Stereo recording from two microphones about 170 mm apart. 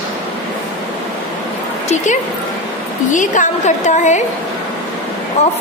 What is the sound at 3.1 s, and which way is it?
A woman's voice, 50° left (ahead or behind).